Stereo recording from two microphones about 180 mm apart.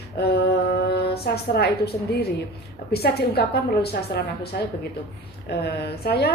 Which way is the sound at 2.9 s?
60° left (ahead or behind).